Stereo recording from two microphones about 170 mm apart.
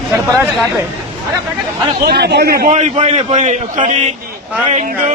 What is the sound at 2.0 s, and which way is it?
Speech, 75° right (ahead or behind).